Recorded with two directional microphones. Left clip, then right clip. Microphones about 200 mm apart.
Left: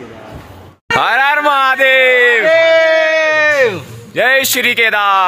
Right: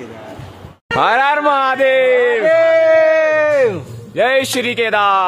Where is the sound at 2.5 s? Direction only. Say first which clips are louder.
Right 1 dB; 50° right (ahead or behind).